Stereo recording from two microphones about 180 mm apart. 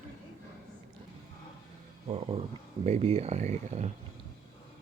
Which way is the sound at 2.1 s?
30° right (ahead or behind).